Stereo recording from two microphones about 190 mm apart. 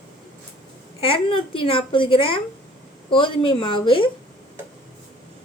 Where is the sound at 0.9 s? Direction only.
30° left (ahead or behind).